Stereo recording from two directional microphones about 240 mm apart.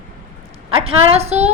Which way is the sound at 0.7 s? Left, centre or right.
Right.